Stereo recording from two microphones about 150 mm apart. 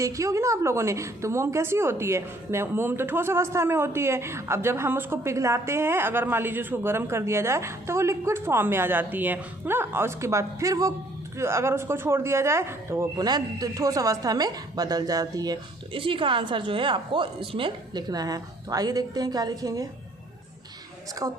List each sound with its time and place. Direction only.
0.0 s a woman's voice: 20° right (ahead or behind)
21.2 s speech: 20° right (ahead or behind)